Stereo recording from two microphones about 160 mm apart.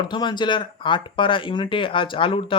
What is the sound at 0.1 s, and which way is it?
Speech, 30° left (ahead or behind).